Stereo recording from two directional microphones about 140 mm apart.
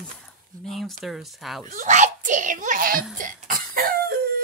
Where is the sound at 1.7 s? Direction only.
60° right (ahead or behind); by 3.0 s 80° right.